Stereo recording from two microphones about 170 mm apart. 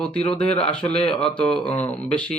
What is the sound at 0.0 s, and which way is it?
A man's voice, 5° left (ahead or behind).